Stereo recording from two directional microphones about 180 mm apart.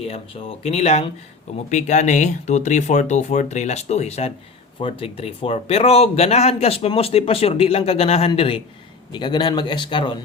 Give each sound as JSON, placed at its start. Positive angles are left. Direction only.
{"t": 0.0, "sound": "speech", "side_deg": 30}